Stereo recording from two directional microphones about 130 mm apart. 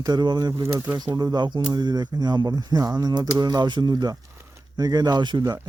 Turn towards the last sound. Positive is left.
turn(degrees=-35)  # may be behind; listen again after turning